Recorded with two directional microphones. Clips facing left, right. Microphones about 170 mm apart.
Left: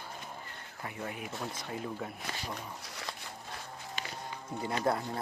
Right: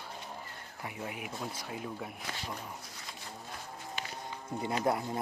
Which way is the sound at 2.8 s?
75° left (ahead or behind).